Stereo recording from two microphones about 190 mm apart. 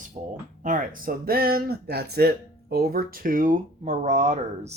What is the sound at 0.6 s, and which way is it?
Speech, 45° right (ahead or behind).